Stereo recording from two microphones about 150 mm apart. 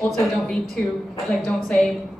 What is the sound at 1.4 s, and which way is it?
Speech, 5° left (ahead or behind).